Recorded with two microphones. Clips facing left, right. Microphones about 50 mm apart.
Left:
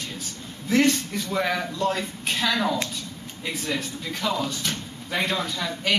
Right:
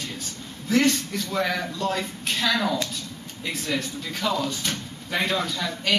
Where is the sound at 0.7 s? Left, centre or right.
Left.